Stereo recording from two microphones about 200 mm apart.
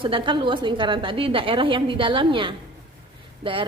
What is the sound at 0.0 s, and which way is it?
A woman's voice, 25° right (ahead or behind).